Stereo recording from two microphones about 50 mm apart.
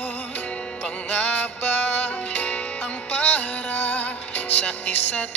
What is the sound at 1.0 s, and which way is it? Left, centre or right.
Music, left.